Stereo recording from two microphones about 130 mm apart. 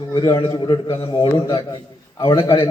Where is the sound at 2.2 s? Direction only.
30° left (ahead or behind).